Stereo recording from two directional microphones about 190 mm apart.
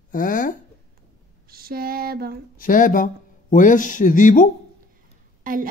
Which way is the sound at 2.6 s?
45° left (ahead or behind).